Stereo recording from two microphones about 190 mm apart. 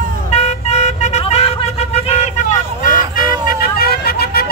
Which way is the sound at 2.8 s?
50° left (ahead or behind).